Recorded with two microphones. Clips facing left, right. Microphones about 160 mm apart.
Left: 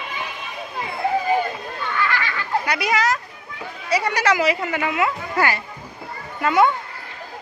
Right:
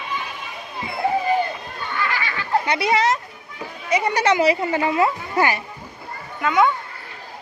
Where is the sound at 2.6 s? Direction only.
25° right (ahead or behind).